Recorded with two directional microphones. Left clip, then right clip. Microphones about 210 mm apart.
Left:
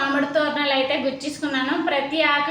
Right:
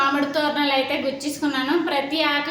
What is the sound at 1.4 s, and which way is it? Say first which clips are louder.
Speech: right 2 dB; 20° right (ahead or behind).